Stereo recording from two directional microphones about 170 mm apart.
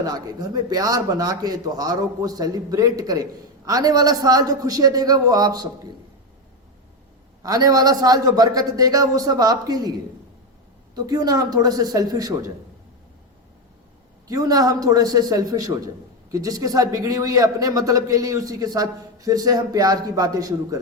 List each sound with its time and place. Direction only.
0.0 s a man's voice: 20° right (ahead or behind)
7.4 s a man's voice: 20° right (ahead or behind)
10.9 s a man's voice: 20° right (ahead or behind)
14.3 s a man's voice: 20° right (ahead or behind)